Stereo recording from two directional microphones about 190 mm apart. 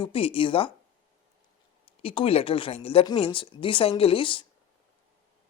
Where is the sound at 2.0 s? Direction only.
30° left (ahead or behind).